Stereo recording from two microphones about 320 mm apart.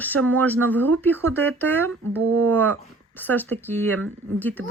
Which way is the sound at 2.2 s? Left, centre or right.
Right.